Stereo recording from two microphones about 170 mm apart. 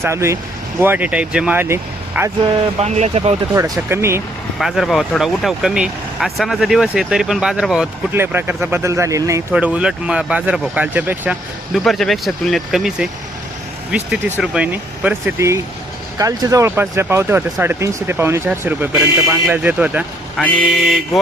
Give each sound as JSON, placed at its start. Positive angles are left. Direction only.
{"t": 0.0, "sound": "speech", "side_deg": -15}
{"t": 2.8, "sound": "speech", "side_deg": -40}
{"t": 3.5, "sound": "speech", "side_deg": -15}
{"t": 4.5, "sound": "speech", "side_deg": 0}